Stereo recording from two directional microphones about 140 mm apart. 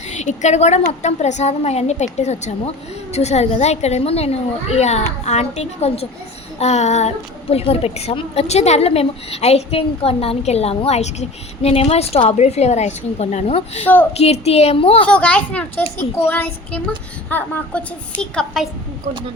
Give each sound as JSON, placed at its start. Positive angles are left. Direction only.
{"t": 0.1, "sound": "a woman's voice", "side_deg": 55}
{"t": 13.8, "sound": "a child's voice", "side_deg": 15}
{"t": 14.1, "sound": "a woman's voice", "side_deg": 50}
{"t": 15.0, "sound": "a child's voice", "side_deg": 10}